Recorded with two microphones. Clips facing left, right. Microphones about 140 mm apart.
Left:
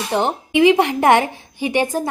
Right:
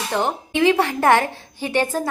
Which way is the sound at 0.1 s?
20° left (ahead or behind).